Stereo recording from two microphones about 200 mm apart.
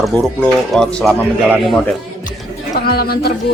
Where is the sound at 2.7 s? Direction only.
50° left (ahead or behind).